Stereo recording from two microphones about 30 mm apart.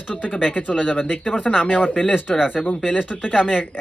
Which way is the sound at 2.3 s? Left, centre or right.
Left.